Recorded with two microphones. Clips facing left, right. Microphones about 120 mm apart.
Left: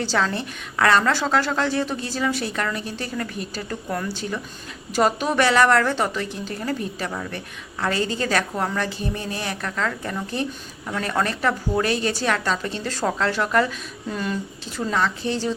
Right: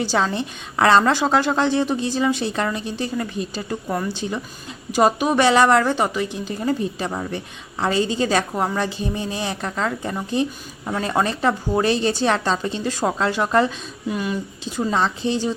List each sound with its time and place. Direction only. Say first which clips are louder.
0.0 s a woman's voice: right 2 dB; 15° right (ahead or behind)
14.1 s a woman's voice: right 2 dB; 10° right (ahead or behind)